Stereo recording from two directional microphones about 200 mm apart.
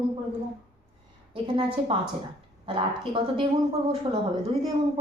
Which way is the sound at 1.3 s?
25° right (ahead or behind).